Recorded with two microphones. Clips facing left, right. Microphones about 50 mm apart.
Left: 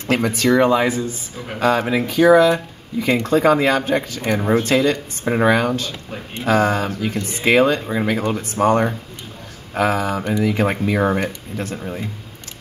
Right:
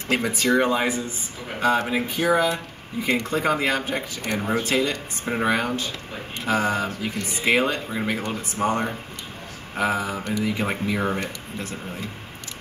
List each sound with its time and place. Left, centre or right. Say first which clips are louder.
0.1 s speech: left 4 dB; left
1.6 s speech: left 4 dB; left
3.3 s speech: left 11 dB; left
4.2 s speech: left 6 dB; left
4.6 s speech: left 6 dB; left
8.6 s speech: left 7 dB; left
9.8 s speech: left 5 dB; left
10.7 s speech: left 6 dB; left